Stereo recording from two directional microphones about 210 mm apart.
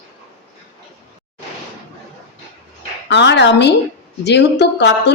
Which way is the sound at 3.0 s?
55° left (ahead or behind).